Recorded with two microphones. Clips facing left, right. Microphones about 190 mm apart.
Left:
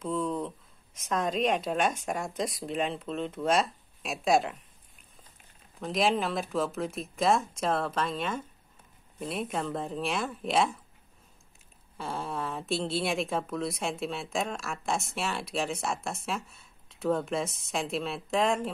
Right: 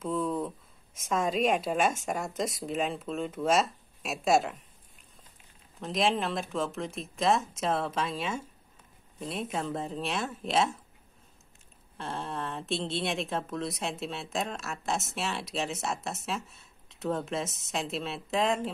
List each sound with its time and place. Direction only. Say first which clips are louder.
0.0 s a sound: even; 5° right (ahead or behind)
0.9 s speech: right 1 dB; 5° right (ahead or behind)
5.8 s speech: left 1 dB; centre (ahead or behind)
12.0 s speech: left 1 dB; centre (ahead or behind)